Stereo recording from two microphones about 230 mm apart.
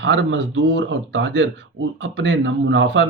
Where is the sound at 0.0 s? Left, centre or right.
Right.